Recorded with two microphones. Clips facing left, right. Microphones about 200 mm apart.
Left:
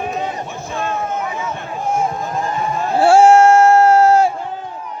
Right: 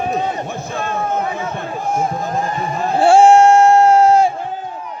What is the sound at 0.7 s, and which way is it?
Speech, 35° right (ahead or behind).